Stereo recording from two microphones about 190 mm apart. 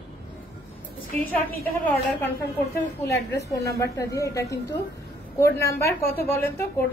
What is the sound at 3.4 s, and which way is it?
A woman's voice, 15° left (ahead or behind).